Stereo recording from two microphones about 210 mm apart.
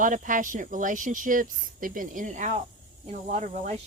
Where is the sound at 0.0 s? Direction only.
40° right (ahead or behind).